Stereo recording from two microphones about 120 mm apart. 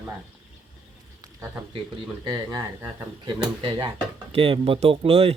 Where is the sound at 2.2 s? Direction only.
35° right (ahead or behind).